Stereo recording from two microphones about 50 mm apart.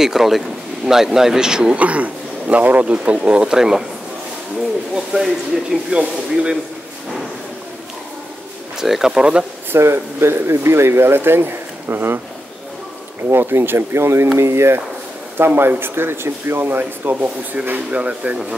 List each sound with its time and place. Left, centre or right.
0.0 s speech: centre
1.8 s a man's voice: right
3.5 s speech: centre
4.9 s speech: centre
5.9 s speech: centre
8.7 s speech: centre
9.8 s speech: right
13.3 s speech: right
15.3 s speech: right
17.9 s speech: right